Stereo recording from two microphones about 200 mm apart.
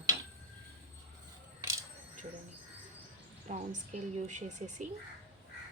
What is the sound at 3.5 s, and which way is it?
Speech, 35° right (ahead or behind).